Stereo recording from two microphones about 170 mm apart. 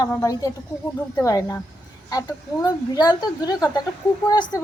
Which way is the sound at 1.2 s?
20° left (ahead or behind).